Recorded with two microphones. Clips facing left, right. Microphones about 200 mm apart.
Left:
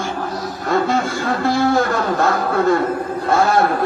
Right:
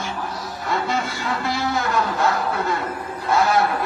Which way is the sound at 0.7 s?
55° left (ahead or behind).